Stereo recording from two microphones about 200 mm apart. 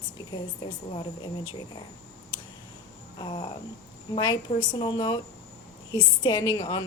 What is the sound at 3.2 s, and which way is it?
A woman's voice, 25° left (ahead or behind).